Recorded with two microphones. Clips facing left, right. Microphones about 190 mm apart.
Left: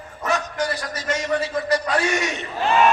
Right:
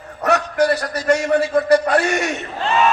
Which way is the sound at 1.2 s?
55° right (ahead or behind).